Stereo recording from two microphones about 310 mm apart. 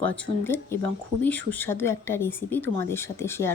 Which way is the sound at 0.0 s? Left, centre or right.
Centre.